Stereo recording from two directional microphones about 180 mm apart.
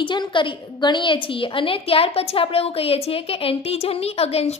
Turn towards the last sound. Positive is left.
turn(degrees=35)  # may be behind; listen again after turning